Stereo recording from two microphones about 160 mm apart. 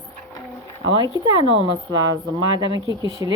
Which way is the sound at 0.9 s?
25° right (ahead or behind).